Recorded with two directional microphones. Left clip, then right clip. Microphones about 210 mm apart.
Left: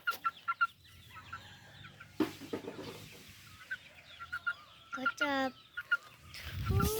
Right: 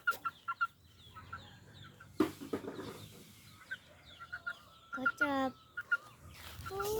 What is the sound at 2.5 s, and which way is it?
Chicken, 40° right (ahead or behind).